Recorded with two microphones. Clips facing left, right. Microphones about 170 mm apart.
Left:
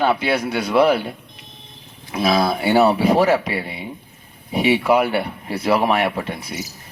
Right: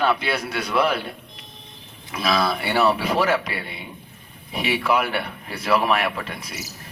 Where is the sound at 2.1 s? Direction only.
25° left (ahead or behind).